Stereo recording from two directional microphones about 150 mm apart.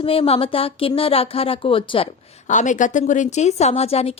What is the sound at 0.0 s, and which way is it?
A woman's voice, 40° left (ahead or behind).